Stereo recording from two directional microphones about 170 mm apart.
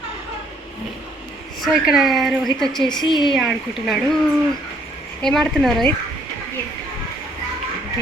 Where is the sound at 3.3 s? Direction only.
Centre (ahead or behind).